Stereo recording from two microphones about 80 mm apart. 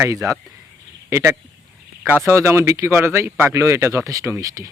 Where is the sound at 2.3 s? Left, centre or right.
Right.